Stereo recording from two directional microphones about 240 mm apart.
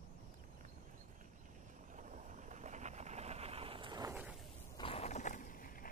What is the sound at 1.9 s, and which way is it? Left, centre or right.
Vehicle, right.